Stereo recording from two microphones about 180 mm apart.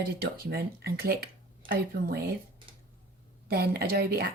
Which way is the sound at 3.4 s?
60° right (ahead or behind).